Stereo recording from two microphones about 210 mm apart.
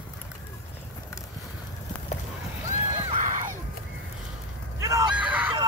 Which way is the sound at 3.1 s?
35° right (ahead or behind).